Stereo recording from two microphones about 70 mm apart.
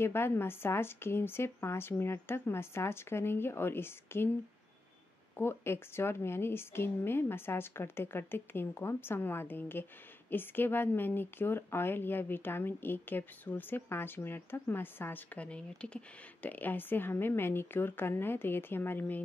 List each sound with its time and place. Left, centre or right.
0.0 s a woman's voice: left
5.4 s a woman's voice: left
15.3 s a woman's voice: centre